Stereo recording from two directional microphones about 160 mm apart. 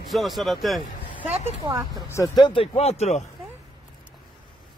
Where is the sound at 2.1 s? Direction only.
25° left (ahead or behind); by 3.2 s 45° left (ahead or behind).